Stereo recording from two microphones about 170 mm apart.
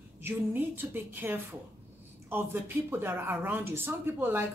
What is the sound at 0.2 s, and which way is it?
Speech, 10° right (ahead or behind).